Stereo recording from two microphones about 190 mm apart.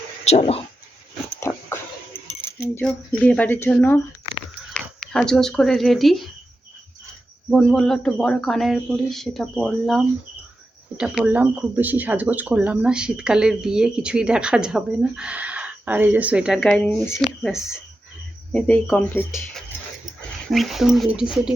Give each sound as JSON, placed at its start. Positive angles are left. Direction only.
{"t": 0.3, "sound": "speech", "side_deg": 30}
{"t": 1.4, "sound": "dog", "side_deg": 15}
{"t": 3.2, "sound": "speech", "side_deg": 10}
{"t": 5.1, "sound": "speech", "side_deg": 5}
{"t": 7.5, "sound": "speech", "side_deg": 5}
{"t": 16.6, "sound": "speech", "side_deg": 5}
{"t": 18.5, "sound": "speech", "side_deg": 5}